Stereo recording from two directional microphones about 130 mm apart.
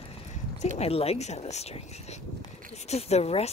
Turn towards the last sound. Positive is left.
turn(degrees=50)  # may be behind; listen again after turning